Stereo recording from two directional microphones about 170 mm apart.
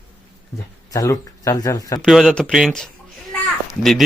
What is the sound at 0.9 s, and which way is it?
Speech, 20° left (ahead or behind).